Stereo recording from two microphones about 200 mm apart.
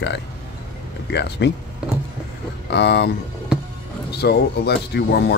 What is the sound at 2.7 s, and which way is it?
Speech, 55° left (ahead or behind).